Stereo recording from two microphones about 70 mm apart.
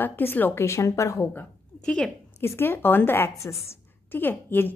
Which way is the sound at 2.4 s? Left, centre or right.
Left.